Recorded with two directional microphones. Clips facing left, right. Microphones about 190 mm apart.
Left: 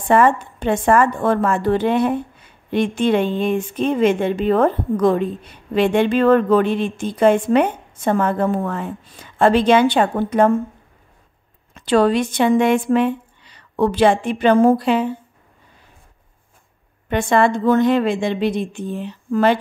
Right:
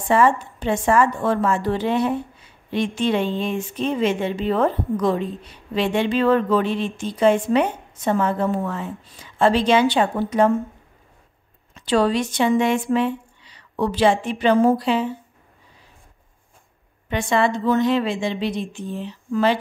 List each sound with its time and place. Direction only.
0.1 s speech: 55° left (ahead or behind)
11.7 s speech: 55° left (ahead or behind)
17.1 s a woman's voice: 55° left (ahead or behind)